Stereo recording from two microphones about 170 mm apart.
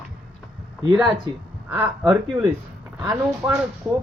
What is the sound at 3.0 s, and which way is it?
Speech, 20° right (ahead or behind).